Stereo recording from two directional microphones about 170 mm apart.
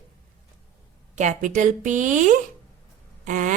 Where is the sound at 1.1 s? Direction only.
45° right (ahead or behind).